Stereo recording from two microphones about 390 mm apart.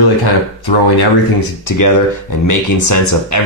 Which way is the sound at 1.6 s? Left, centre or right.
Left.